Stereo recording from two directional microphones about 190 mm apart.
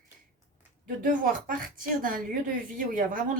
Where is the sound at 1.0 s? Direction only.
45° right (ahead or behind).